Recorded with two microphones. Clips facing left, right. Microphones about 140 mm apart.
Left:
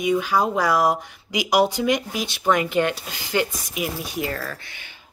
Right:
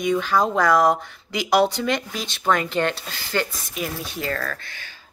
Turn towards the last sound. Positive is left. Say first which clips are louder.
# even
turn(degrees=15)  # may be behind; listen again after turning